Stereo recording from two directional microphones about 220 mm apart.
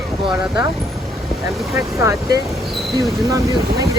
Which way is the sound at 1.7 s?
15° right (ahead or behind).